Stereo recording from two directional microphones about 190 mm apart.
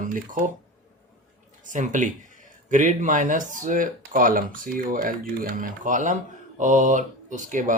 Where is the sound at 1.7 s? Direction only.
40° right (ahead or behind).